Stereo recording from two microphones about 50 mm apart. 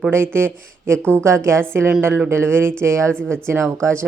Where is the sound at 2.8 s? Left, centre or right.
Right.